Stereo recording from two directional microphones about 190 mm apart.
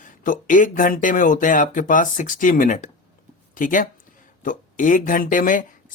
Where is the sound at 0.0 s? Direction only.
45° left (ahead or behind).